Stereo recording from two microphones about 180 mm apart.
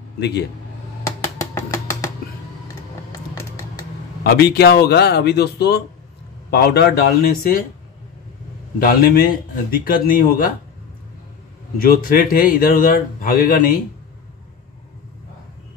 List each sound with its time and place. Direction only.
0.2 s speech: 70° left (ahead or behind)
1.0 s a sound: 15° left (ahead or behind)
3.1 s music: 20° left (ahead or behind)
4.2 s speech: 60° left (ahead or behind)
8.7 s a man's voice: 55° left (ahead or behind)
11.8 s a man's voice: 55° left (ahead or behind)